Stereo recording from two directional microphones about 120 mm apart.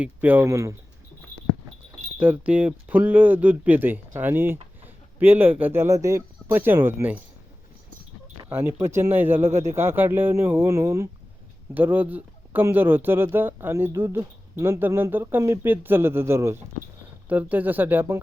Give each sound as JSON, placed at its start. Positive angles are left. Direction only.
{"t": 0.0, "sound": "speech", "side_deg": -15}
{"t": 2.1, "sound": "speech", "side_deg": -15}
{"t": 8.4, "sound": "speech", "side_deg": -20}